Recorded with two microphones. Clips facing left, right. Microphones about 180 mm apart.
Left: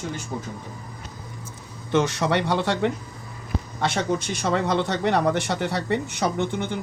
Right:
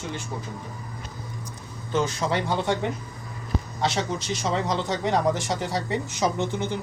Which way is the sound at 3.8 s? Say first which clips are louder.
Left 3 dB; 55° left (ahead or behind).